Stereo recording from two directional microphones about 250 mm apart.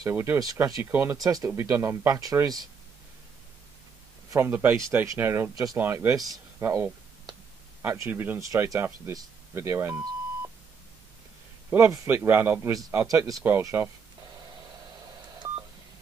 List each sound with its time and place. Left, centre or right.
0.0 s speech: centre
4.3 s speech: centre
11.7 s speech: centre
15.3 s telephone dialing: centre